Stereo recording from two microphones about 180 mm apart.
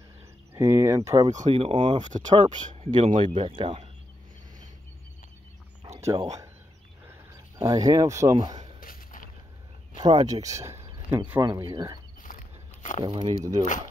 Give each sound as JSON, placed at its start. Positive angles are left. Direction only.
{"t": 0.6, "sound": "speech", "side_deg": -15}
{"t": 1.3, "sound": "speech", "side_deg": -35}
{"t": 2.0, "sound": "speech", "side_deg": -40}
{"t": 2.3, "sound": "speech", "side_deg": -30}
{"t": 5.9, "sound": "a sound", "side_deg": -15}
{"t": 7.1, "sound": "speech", "side_deg": -20}
{"t": 8.7, "sound": "a sound", "side_deg": 50}
{"t": 10.1, "sound": "speech", "side_deg": -20}
{"t": 12.2, "sound": "a sound", "side_deg": 50}
{"t": 13.0, "sound": "speech", "side_deg": -25}